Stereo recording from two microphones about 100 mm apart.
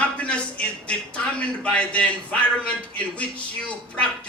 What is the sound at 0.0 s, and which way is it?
A man's voice, 10° left (ahead or behind).